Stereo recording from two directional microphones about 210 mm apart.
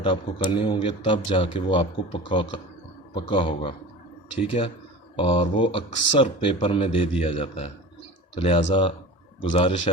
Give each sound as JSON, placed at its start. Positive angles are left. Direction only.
{"t": 0.0, "sound": "speech", "side_deg": 25}